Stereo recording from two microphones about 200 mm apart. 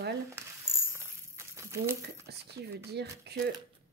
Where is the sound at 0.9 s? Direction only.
15° right (ahead or behind).